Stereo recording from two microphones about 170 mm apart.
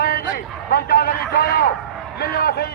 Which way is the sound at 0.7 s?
65° left (ahead or behind).